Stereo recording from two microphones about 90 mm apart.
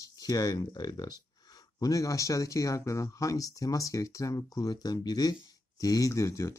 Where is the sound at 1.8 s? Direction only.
40° left (ahead or behind).